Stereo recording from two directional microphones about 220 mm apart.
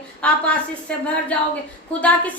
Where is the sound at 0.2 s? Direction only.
5° left (ahead or behind).